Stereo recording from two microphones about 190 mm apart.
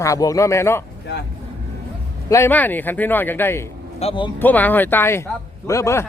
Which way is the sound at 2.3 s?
10° left (ahead or behind).